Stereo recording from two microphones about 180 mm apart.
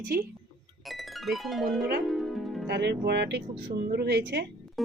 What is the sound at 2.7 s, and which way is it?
Speech, 70° right (ahead or behind).